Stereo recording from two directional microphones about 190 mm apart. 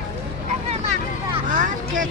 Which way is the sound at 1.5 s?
45° right (ahead or behind).